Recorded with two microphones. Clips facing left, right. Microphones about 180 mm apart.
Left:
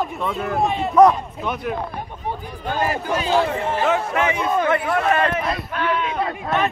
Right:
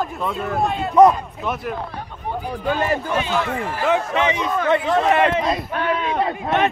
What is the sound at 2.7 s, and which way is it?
A man's voice, 40° left (ahead or behind).